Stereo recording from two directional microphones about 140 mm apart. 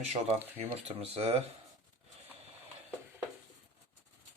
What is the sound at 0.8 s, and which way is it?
Speech, 45° right (ahead or behind).